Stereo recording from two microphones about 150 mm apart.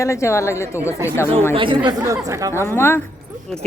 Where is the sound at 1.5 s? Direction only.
35° right (ahead or behind).